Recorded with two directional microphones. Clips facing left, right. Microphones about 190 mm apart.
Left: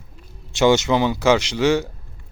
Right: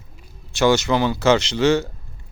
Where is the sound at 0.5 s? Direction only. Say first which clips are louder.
Left 1 dB; 20° left (ahead or behind).